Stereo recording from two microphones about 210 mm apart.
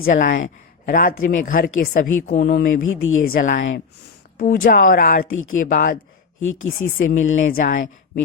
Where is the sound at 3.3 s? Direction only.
45° left (ahead or behind).